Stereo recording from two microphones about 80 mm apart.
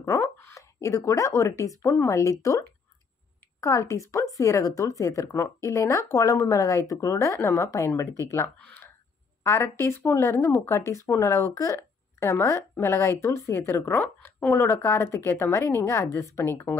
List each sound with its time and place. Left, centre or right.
0.0 s speech: left
3.6 s speech: left